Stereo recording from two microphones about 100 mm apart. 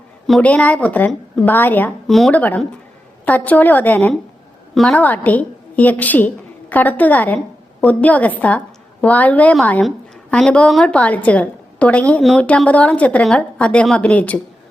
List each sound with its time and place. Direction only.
0.4 s a woman's voice: 15° left (ahead or behind)
2.0 s speech: centre (ahead or behind)
2.3 s a woman's voice: 15° left (ahead or behind)
4.7 s a woman's voice: 5° left (ahead or behind)
4.9 s a woman's voice: 15° left (ahead or behind)